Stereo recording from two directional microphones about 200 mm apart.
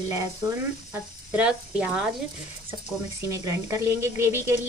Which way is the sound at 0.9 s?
5° right (ahead or behind).